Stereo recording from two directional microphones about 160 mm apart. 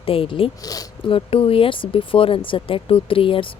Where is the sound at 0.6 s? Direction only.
25° left (ahead or behind).